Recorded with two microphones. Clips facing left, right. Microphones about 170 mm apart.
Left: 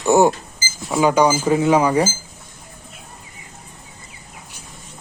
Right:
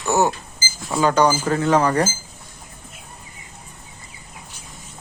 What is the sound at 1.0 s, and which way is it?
Speech, 10° left (ahead or behind).